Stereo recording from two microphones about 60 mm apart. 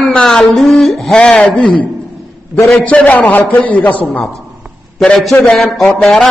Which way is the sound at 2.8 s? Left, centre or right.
Left.